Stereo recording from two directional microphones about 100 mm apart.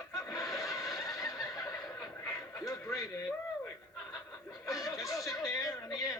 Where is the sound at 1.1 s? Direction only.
35° left (ahead or behind).